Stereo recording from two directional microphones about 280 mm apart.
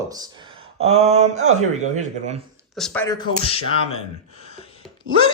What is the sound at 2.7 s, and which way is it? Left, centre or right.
Speech, centre.